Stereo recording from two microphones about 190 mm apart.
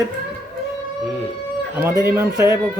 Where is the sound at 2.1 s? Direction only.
10° right (ahead or behind).